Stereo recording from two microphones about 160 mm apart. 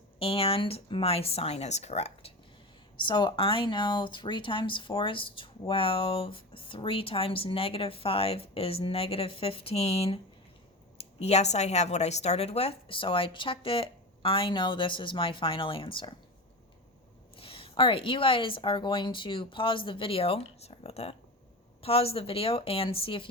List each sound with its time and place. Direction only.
0.2 s speech: 35° left (ahead or behind)
3.1 s speech: 30° left (ahead or behind)
17.3 s speech: 35° left (ahead or behind)